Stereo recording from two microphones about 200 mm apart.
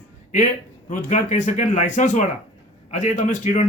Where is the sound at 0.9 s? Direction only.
40° left (ahead or behind).